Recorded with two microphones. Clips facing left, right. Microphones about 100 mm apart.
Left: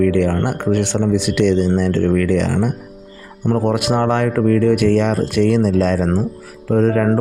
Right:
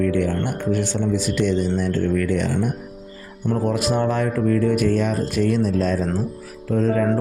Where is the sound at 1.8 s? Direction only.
90° left.